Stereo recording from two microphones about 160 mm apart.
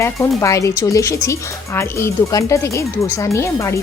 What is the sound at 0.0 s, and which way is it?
Speech, 20° left (ahead or behind).